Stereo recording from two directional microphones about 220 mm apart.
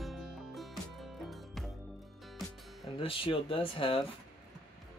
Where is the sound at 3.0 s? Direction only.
25° left (ahead or behind).